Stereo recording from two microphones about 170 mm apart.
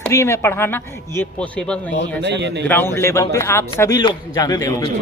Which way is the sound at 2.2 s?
90° right.